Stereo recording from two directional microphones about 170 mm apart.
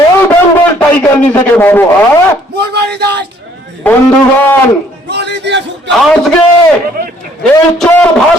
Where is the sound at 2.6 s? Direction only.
75° right (ahead or behind).